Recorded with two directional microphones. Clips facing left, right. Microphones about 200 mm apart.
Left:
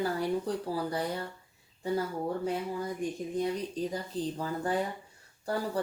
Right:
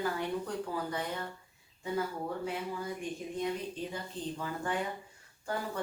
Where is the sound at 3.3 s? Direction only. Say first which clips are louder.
Left 3 dB; 35° left (ahead or behind).